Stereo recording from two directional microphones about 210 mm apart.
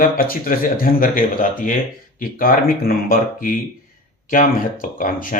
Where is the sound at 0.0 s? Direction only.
45° left (ahead or behind).